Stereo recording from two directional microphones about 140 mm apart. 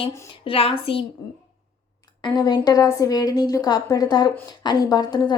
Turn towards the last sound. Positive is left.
turn(degrees=30)  # may be behind; listen again after turning